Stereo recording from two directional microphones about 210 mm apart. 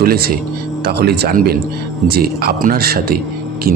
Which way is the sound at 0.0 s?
45° right (ahead or behind).